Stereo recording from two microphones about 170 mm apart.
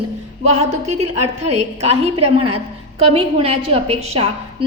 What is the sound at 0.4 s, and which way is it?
A woman's voice, 40° right (ahead or behind).